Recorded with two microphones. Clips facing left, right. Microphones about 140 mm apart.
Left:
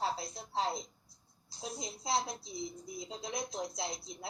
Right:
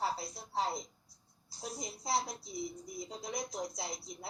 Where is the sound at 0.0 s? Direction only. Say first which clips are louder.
Left 1 dB; 20° left (ahead or behind).